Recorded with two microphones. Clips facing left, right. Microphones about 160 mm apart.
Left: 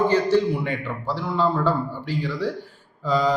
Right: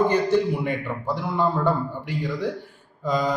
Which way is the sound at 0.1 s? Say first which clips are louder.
Left 1 dB; 15° right (ahead or behind).